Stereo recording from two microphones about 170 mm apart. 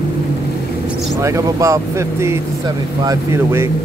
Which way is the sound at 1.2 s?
20° right (ahead or behind).